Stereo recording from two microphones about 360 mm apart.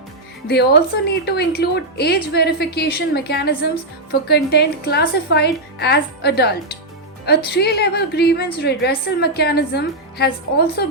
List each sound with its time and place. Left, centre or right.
0.4 s a woman's voice: left